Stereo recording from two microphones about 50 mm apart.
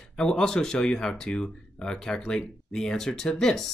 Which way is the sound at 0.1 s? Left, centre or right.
Centre.